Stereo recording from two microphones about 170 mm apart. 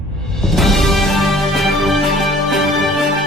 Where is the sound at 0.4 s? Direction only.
Centre (ahead or behind).